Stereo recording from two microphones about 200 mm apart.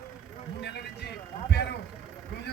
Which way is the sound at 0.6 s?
55° left (ahead or behind).